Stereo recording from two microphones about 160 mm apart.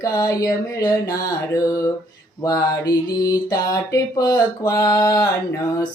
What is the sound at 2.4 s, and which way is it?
Speech, 20° left (ahead or behind).